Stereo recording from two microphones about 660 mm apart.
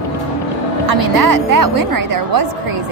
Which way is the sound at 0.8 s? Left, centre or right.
Right.